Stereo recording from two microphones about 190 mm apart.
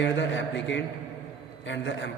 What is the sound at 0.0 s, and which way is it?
A man's voice, 70° left (ahead or behind).